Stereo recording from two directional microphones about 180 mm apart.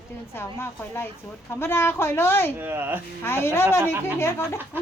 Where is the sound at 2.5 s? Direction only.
10° right (ahead or behind).